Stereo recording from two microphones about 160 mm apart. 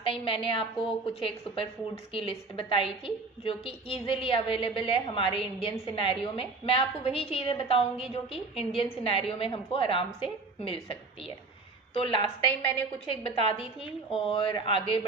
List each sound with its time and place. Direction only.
0.0 s a woman's voice: 35° left (ahead or behind)